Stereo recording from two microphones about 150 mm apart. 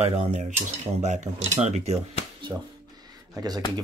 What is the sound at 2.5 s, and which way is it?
Speech, 10° right (ahead or behind).